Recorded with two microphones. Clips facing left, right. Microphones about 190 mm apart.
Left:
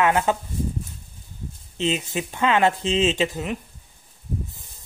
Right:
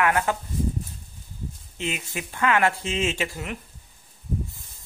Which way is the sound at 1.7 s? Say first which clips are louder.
Left 7 dB; 20° left (ahead or behind).